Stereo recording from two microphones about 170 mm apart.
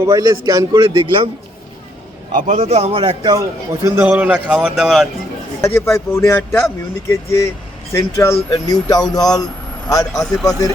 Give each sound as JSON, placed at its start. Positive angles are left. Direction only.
{"t": 0.0, "sound": "a man's voice", "side_deg": -20}
{"t": 2.3, "sound": "a man's voice", "side_deg": -45}
{"t": 3.8, "sound": "a man's voice", "side_deg": -10}
{"t": 5.6, "sound": "speech", "side_deg": 15}